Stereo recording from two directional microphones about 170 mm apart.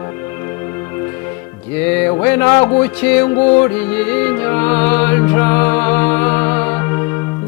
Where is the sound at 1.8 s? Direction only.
10° left (ahead or behind).